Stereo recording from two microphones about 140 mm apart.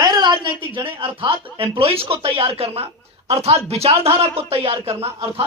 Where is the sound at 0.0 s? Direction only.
30° right (ahead or behind).